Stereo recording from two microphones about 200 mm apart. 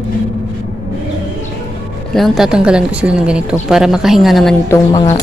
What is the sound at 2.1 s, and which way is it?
Speech, centre (ahead or behind).